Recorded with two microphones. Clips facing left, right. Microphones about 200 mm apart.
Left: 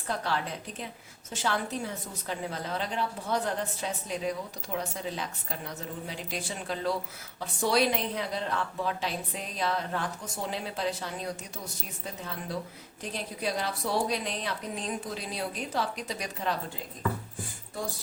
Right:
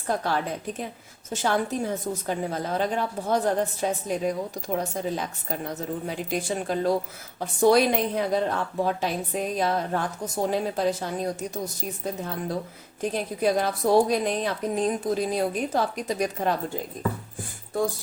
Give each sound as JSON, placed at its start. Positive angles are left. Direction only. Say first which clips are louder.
{"t": 0.1, "sound": "a woman's voice", "louder": "right 5 dB", "side_deg": -50}